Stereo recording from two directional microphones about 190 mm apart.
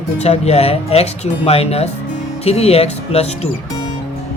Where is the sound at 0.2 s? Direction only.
35° left (ahead or behind).